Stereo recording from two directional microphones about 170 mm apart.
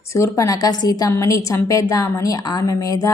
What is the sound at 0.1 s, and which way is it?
A woman's voice, 20° left (ahead or behind).